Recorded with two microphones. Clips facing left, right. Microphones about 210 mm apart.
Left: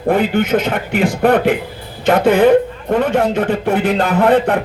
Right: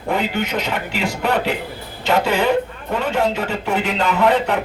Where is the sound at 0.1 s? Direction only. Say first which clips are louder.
Left 7 dB; 50° left (ahead or behind).